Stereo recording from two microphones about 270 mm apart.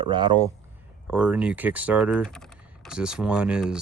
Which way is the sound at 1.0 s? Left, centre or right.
Centre.